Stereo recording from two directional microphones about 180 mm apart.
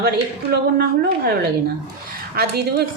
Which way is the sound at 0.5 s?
60° right (ahead or behind).